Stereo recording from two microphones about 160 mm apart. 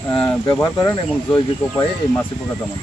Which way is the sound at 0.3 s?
20° left (ahead or behind).